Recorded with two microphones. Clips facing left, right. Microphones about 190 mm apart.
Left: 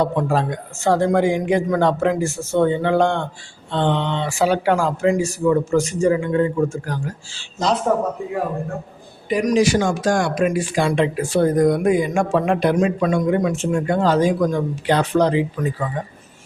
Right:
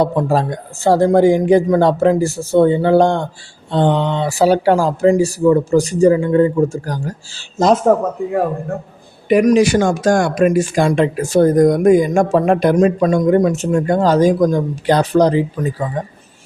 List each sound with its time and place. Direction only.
0.0 s speech: 35° right (ahead or behind)
9.3 s speech: 60° right (ahead or behind); by 16.1 s 40° right (ahead or behind)